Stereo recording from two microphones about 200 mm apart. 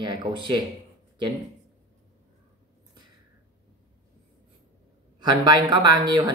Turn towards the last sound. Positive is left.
turn(degrees=-20)  # may be behind; listen again after turning